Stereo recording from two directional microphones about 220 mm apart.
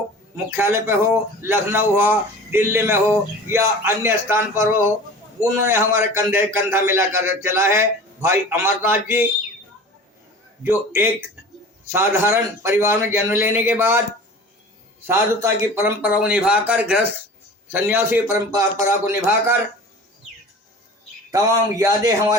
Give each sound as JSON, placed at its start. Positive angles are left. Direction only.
{"t": 0.5, "sound": "a man's voice", "side_deg": -10}
{"t": 10.6, "sound": "a man's voice", "side_deg": -10}
{"t": 15.0, "sound": "a man's voice", "side_deg": -15}
{"t": 21.3, "sound": "a man's voice", "side_deg": -15}